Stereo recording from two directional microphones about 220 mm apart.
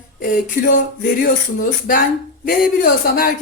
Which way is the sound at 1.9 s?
40° left (ahead or behind).